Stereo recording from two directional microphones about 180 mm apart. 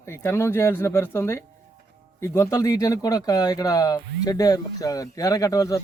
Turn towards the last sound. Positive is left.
turn(degrees=20)  # may be behind; listen again after turning